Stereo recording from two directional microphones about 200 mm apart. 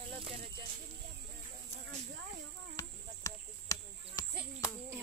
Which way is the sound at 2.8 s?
15° left (ahead or behind).